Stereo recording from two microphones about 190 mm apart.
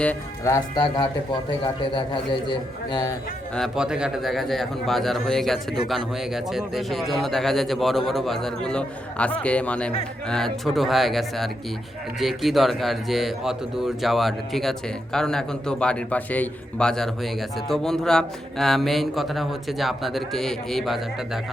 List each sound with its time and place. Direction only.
0.0 s a man's voice: 10° left (ahead or behind)
3.5 s a man's voice: centre (ahead or behind)